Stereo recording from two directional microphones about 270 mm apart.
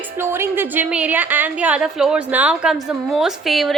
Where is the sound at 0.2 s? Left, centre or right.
Centre.